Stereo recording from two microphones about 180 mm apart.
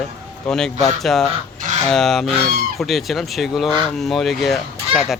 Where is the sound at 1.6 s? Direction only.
40° right (ahead or behind).